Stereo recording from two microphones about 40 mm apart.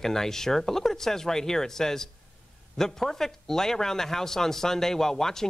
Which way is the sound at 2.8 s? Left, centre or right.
Centre.